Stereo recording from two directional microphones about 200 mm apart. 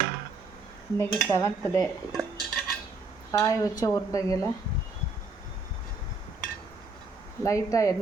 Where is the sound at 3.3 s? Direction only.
15° left (ahead or behind).